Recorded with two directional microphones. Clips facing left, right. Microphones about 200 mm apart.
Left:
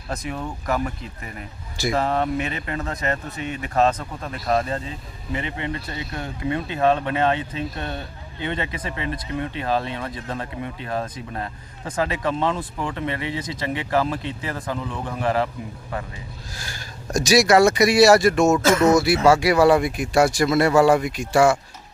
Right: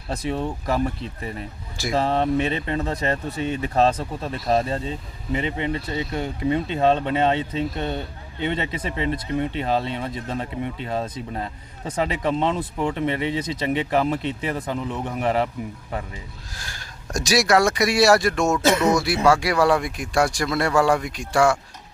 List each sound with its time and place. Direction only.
0.3 s speech: 25° right (ahead or behind)
2.0 s speech: 25° right (ahead or behind)
16.5 s speech: centre (ahead or behind)